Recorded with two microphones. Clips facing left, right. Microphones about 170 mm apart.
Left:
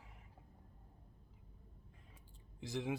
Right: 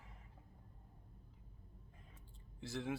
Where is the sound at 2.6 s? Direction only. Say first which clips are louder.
Left 2 dB; 15° left (ahead or behind).